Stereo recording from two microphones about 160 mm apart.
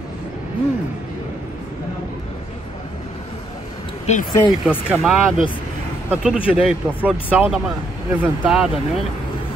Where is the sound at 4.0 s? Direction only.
50° left (ahead or behind).